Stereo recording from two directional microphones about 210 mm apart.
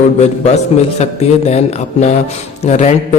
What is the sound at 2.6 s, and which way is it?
Speech, 35° left (ahead or behind).